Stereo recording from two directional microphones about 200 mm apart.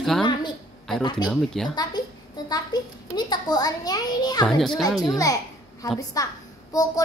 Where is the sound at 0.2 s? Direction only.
20° left (ahead or behind).